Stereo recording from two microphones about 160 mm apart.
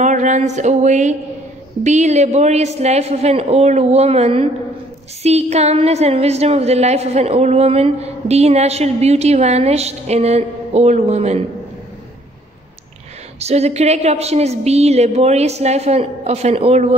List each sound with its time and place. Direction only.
0.0 s a man's voice: 50° right (ahead or behind)
13.4 s a woman's voice: 40° right (ahead or behind)